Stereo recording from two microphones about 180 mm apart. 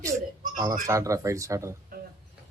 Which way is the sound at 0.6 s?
20° right (ahead or behind).